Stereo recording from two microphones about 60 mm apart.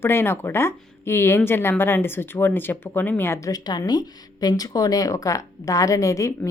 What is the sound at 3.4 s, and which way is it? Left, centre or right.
A woman's voice, left.